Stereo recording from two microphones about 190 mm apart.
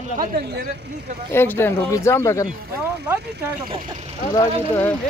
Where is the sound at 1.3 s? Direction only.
10° left (ahead or behind).